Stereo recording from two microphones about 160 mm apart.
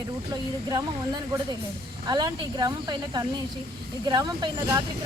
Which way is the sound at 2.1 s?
25° right (ahead or behind).